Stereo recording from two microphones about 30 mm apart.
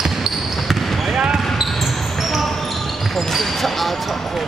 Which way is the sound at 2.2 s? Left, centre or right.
Centre.